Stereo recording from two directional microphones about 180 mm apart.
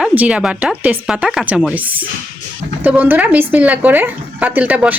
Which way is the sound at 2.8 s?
10° right (ahead or behind).